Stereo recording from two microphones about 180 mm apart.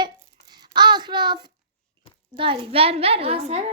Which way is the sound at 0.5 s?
25° right (ahead or behind).